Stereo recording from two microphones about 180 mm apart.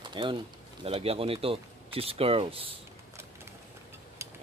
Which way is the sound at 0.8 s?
35° right (ahead or behind).